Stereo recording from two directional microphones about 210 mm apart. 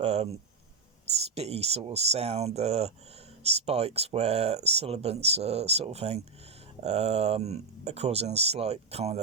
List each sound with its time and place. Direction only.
0.0 s speech: 30° right (ahead or behind)
1.4 s speech: 30° right (ahead or behind)